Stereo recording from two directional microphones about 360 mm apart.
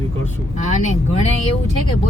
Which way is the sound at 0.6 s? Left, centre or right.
Centre.